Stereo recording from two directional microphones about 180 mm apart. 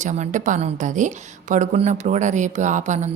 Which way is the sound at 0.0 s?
40° right (ahead or behind).